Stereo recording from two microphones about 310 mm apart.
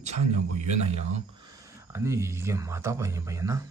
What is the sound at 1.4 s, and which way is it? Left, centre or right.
A man's voice, centre.